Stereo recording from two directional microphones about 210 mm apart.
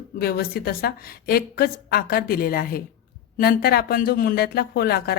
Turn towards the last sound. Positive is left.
turn(degrees=50)  # may be behind; listen again after turning